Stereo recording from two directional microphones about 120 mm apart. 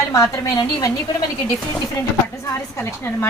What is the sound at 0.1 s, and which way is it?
Speech, 25° left (ahead or behind).